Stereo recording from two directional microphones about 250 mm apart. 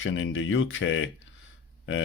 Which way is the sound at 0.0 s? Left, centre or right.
Left.